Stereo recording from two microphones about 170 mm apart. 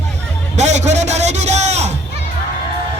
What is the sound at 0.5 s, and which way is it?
A man's voice, 40° right (ahead or behind).